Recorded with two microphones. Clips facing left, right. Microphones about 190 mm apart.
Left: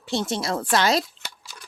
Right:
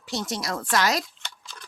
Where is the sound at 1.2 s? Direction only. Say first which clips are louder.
Left 1 dB; 10° left (ahead or behind).